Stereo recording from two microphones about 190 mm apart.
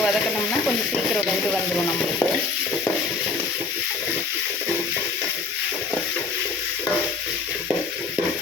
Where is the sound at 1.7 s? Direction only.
10° left (ahead or behind).